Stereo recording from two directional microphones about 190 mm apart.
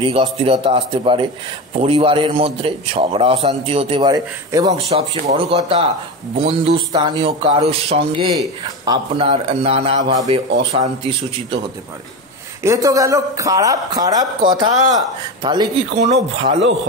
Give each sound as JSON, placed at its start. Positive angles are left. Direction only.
{"t": 0.0, "sound": "a man's voice", "side_deg": -30}
{"t": 4.8, "sound": "a man's voice", "side_deg": -30}
{"t": 12.6, "sound": "a man's voice", "side_deg": -15}